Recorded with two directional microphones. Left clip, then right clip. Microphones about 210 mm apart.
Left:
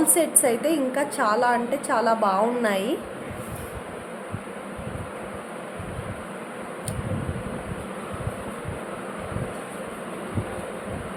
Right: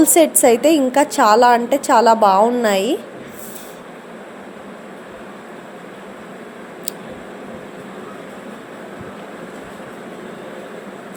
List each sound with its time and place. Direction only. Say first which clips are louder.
0.0 s a woman's voice: right 10 dB; 35° right (ahead or behind)